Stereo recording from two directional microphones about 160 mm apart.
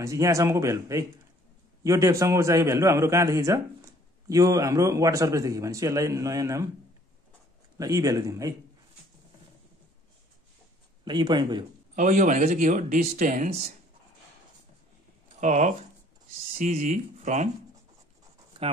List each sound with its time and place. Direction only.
0.0 s a man's voice: 20° right (ahead or behind)
7.7 s a man's voice: 20° right (ahead or behind)
11.1 s a man's voice: 30° right (ahead or behind)
11.9 s speech: 50° right (ahead or behind)
15.4 s speech: 50° right (ahead or behind)